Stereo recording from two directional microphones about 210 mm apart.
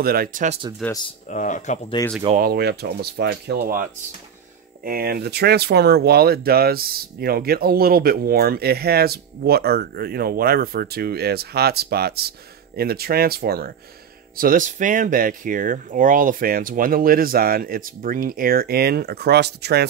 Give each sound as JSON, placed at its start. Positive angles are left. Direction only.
{"t": 0.0, "sound": "speech", "side_deg": -45}
{"t": 1.3, "sound": "speech", "side_deg": 35}
{"t": 2.0, "sound": "speech", "side_deg": 20}
{"t": 2.3, "sound": "speech", "side_deg": -45}